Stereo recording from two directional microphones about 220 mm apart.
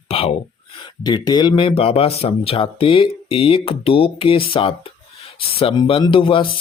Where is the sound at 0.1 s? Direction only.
25° left (ahead or behind).